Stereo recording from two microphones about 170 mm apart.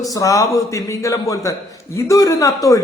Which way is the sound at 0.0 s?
20° left (ahead or behind).